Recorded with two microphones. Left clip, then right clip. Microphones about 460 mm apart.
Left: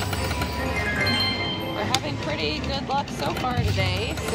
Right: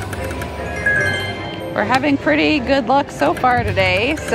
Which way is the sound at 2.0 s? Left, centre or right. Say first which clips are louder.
Right 12 dB; right.